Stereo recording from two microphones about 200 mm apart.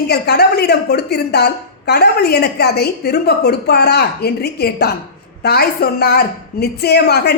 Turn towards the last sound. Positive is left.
turn(degrees=55)  # may be behind; listen again after turning